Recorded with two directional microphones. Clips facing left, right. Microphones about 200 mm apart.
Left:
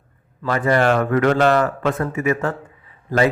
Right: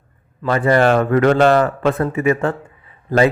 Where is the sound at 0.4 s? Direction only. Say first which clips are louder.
Right 3 dB; 30° right (ahead or behind).